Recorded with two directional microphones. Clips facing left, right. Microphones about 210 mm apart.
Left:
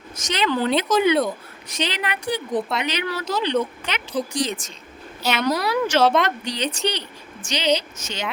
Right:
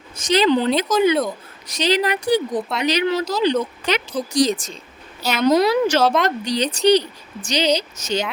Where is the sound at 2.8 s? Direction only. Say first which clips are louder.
Right 7 dB; 35° right (ahead or behind).